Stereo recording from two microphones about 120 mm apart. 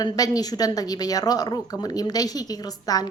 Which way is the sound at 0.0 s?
30° left (ahead or behind).